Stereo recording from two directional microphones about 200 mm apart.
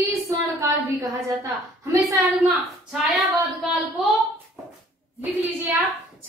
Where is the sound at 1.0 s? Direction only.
15° right (ahead or behind).